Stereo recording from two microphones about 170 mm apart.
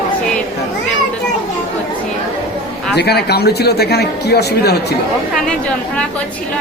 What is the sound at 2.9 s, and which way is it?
Speech, 70° left (ahead or behind).